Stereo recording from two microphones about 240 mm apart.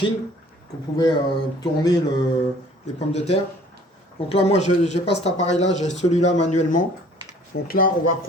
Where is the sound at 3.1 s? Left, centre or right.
Left.